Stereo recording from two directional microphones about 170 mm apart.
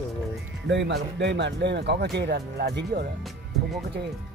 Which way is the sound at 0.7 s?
90° right.